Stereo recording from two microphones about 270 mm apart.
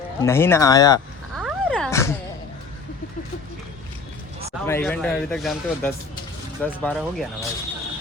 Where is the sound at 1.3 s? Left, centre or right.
Centre.